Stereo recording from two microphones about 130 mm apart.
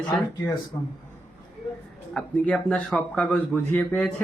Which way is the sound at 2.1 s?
10° left (ahead or behind).